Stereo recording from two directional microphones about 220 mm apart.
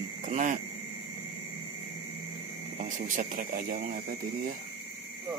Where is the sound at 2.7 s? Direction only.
35° right (ahead or behind).